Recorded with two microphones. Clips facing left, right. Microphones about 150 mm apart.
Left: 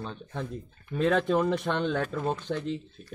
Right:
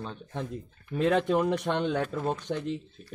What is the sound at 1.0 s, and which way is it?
Speech, 20° right (ahead or behind).